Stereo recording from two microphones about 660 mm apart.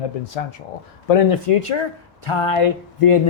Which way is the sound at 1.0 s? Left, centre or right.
Left.